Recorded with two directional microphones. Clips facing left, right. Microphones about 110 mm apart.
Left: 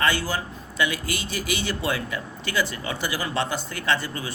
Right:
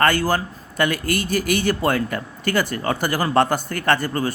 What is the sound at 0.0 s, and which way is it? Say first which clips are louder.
A man's voice: right 6 dB; 50° right (ahead or behind).